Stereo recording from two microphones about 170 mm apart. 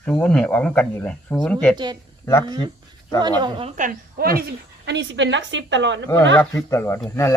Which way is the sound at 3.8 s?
55° right (ahead or behind).